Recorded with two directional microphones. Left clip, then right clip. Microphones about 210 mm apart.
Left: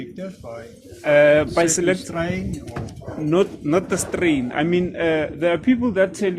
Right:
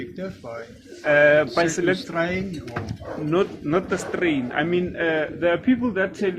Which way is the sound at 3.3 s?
50° left (ahead or behind).